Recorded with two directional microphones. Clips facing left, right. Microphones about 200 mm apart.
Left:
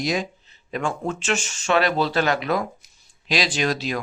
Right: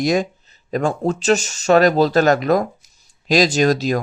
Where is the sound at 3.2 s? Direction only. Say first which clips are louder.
Right 8 dB; 45° right (ahead or behind).